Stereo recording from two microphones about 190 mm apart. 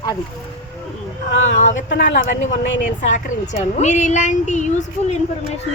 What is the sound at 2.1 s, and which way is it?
A woman's voice, 40° left (ahead or behind).